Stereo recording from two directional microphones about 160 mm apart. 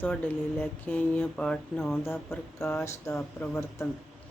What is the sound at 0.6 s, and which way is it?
Speech, 10° left (ahead or behind).